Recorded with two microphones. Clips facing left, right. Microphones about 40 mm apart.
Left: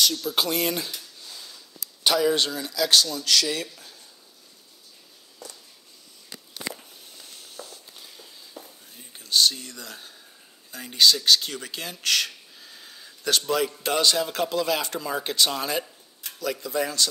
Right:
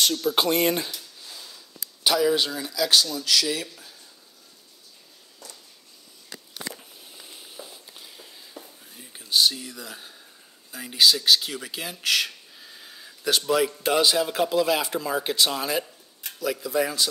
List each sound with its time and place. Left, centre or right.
0.3 s speech: right
1.2 s a sound: centre
2.0 s speech: centre
6.8 s a sound: centre
8.0 s whispering: centre
10.7 s speech: centre